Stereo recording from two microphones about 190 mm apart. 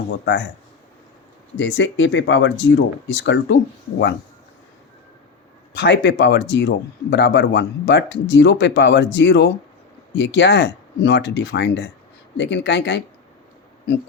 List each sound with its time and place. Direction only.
1.5 s speech: 75° left (ahead or behind)
5.7 s speech: 65° left (ahead or behind)